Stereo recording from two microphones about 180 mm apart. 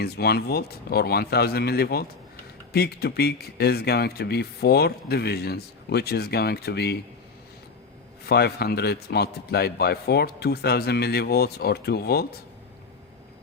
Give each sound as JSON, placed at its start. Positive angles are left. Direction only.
{"t": 0.0, "sound": "speech", "side_deg": 60}
{"t": 8.3, "sound": "speech", "side_deg": 60}